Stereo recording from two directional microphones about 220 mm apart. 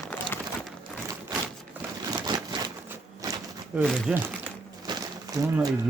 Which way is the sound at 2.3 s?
20° right (ahead or behind).